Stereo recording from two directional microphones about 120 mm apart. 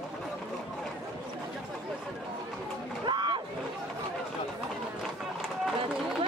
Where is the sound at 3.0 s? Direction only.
40° right (ahead or behind).